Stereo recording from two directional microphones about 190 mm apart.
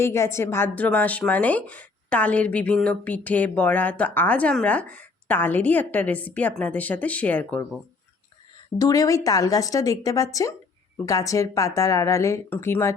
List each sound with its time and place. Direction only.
0.0 s a woman's voice: 15° left (ahead or behind)
8.8 s a woman's voice: 15° left (ahead or behind)